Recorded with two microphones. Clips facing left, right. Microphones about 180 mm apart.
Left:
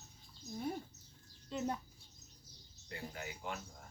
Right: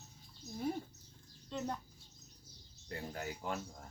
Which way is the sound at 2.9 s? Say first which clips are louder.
Right 4 dB; 40° right (ahead or behind).